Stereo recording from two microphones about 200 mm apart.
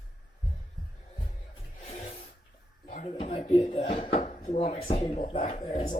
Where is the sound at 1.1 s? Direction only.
30° left (ahead or behind).